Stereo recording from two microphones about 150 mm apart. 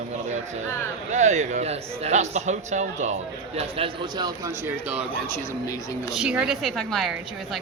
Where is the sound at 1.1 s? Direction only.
50° right (ahead or behind).